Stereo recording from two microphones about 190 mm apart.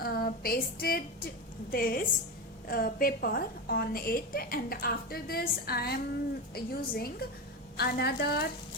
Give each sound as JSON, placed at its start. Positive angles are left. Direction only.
{"t": 0.0, "sound": "a woman's voice", "side_deg": 50}